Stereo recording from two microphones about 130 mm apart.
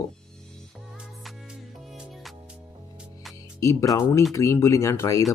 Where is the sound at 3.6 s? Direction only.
25° left (ahead or behind).